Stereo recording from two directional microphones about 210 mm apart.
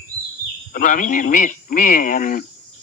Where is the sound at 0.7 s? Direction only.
40° left (ahead or behind).